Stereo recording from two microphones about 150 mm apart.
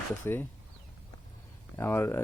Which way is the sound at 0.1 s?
15° left (ahead or behind).